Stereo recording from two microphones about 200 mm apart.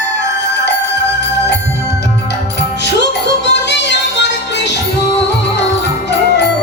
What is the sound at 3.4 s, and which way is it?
Music, 60° left (ahead or behind).